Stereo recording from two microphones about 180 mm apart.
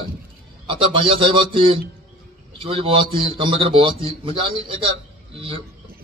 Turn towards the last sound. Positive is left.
turn(degrees=-30)  # may be behind; listen again after turning